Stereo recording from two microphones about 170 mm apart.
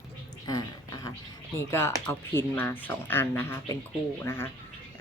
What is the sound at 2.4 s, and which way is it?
Speech, 15° left (ahead or behind).